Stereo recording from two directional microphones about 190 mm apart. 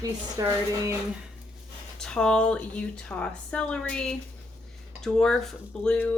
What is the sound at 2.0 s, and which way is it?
A woman's voice, 5° left (ahead or behind).